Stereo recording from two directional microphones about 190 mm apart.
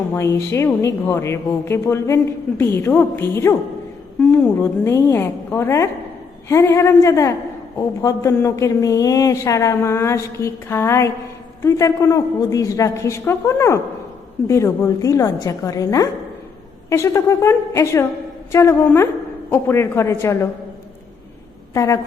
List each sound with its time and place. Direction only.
0.1 s a woman's voice: 15° left (ahead or behind)
21.7 s a woman's voice: 15° left (ahead or behind)